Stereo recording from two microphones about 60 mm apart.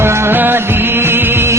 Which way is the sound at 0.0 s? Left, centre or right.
Right.